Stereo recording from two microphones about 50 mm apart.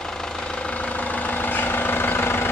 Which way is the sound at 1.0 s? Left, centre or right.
Left.